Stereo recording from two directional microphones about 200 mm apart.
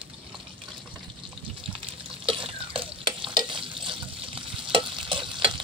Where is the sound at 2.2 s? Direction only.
25° right (ahead or behind).